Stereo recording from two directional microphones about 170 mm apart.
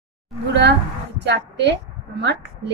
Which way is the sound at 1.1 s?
90° right.